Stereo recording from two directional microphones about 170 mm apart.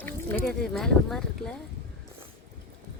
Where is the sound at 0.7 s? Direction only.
Centre (ahead or behind).